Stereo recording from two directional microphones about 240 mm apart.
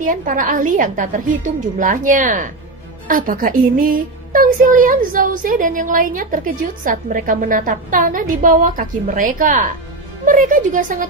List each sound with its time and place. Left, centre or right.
0.0 s a woman's voice: right